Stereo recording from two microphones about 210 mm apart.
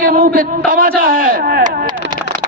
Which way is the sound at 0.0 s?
40° right (ahead or behind).